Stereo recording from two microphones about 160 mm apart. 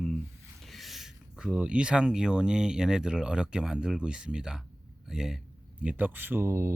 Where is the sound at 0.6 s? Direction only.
Centre (ahead or behind).